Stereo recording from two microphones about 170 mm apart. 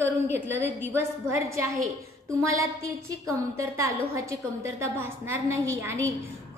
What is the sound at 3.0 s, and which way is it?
A woman's voice, 20° right (ahead or behind).